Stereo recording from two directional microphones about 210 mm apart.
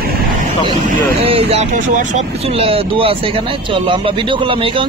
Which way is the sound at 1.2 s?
30° right (ahead or behind).